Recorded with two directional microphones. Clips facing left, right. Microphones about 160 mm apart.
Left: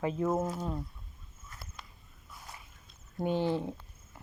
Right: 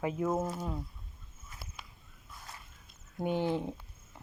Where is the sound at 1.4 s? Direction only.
10° right (ahead or behind).